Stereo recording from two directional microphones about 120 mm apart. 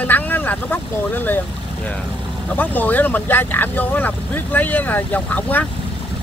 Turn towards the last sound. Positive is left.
turn(degrees=15)  # may be behind; listen again after turning